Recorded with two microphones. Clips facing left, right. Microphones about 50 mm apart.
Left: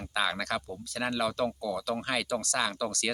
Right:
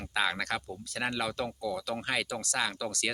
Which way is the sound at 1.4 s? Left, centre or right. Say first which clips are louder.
Left 3 dB; centre.